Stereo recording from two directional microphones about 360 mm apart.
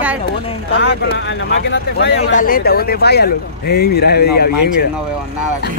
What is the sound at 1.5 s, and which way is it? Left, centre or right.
Speech, left.